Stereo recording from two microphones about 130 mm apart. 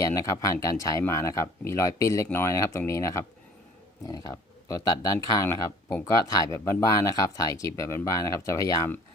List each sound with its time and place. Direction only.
0.0 s speech: 25° left (ahead or behind)